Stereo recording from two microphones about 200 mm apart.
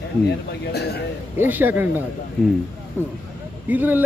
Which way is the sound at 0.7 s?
55° left (ahead or behind).